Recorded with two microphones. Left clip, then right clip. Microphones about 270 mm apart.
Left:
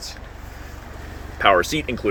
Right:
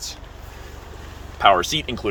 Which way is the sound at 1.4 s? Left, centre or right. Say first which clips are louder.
Right 1 dB; centre.